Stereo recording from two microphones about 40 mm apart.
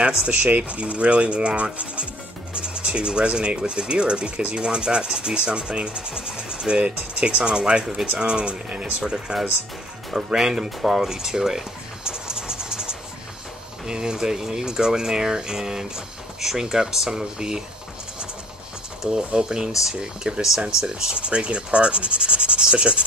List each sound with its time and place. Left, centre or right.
0.0 s speech: right
8.2 s speech: right
9.1 s speech: centre
10.8 s music: centre
13.8 s speech: centre
19.1 s speech: centre